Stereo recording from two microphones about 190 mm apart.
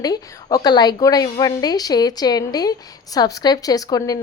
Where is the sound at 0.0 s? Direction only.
20° left (ahead or behind).